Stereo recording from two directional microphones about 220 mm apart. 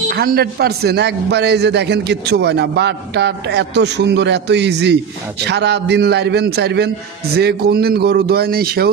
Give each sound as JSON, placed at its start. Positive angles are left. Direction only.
{"t": 0.1, "sound": "a man's voice", "side_deg": -45}